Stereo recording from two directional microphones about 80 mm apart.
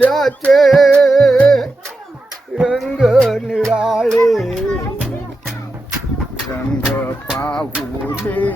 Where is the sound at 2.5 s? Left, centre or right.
Centre.